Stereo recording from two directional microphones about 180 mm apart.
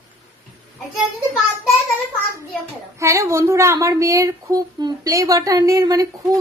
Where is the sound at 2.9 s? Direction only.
15° right (ahead or behind).